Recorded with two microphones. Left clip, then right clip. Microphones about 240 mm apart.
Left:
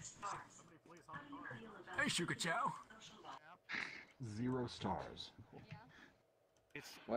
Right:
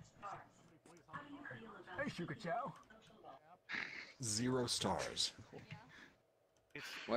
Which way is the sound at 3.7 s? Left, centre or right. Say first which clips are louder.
Even; centre.